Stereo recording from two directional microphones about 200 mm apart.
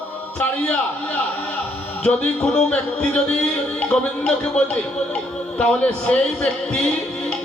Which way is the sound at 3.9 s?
5° left (ahead or behind).